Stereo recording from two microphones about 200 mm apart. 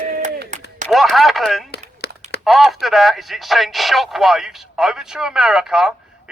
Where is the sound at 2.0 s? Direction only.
55° left (ahead or behind).